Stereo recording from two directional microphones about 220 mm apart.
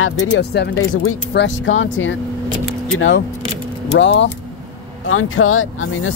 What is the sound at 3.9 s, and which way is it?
Speech, 55° left (ahead or behind).